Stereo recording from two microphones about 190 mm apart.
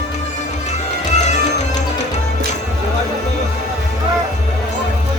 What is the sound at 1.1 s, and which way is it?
Music, 40° left (ahead or behind).